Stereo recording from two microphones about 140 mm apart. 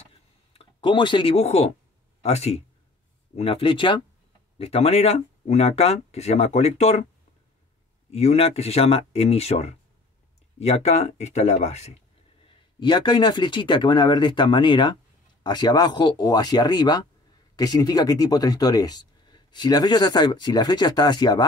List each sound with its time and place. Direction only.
0.5 s speech: 40° left (ahead or behind)
4.6 s speech: 45° left (ahead or behind)
8.1 s speech: 50° left (ahead or behind)
12.8 s speech: 35° left (ahead or behind)